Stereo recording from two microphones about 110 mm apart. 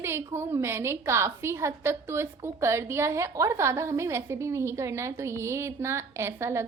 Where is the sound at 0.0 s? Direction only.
20° right (ahead or behind).